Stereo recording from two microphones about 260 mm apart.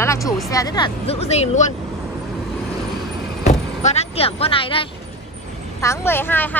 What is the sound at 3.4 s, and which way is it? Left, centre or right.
Speech, left.